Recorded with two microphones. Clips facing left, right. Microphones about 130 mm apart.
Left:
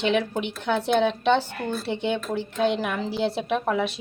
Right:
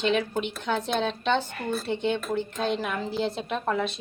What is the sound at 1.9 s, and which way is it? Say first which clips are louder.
Speech: even; 65° left (ahead or behind).